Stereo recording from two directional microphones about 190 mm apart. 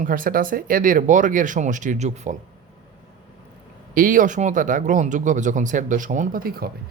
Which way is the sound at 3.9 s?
45° right (ahead or behind).